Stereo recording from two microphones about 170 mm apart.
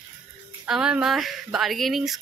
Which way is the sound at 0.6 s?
5° right (ahead or behind).